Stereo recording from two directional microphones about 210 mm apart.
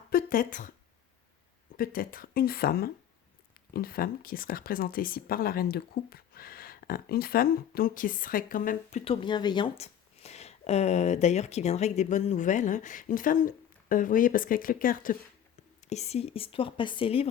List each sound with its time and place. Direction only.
0.1 s a sound: 45° left (ahead or behind)
1.7 s speech: 45° left (ahead or behind)
9.2 s speech: 20° left (ahead or behind); by 15.1 s 40° left (ahead or behind)
15.9 s speech: 30° left (ahead or behind)